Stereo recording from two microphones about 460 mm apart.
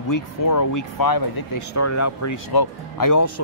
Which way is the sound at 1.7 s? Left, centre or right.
Left.